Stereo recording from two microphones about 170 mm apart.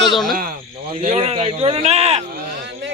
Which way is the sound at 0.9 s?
35° right (ahead or behind).